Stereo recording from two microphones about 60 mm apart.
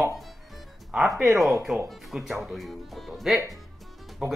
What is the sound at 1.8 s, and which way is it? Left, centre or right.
Speech, centre.